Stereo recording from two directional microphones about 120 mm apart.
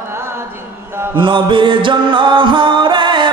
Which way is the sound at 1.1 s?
45° right (ahead or behind).